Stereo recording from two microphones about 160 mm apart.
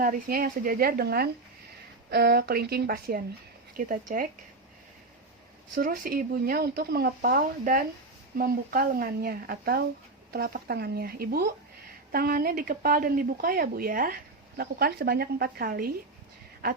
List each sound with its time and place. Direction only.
0.0 s speech: 65° right (ahead or behind)
2.0 s speech: 85° right
3.8 s speech: 60° right (ahead or behind)
5.7 s speech: 60° right (ahead or behind)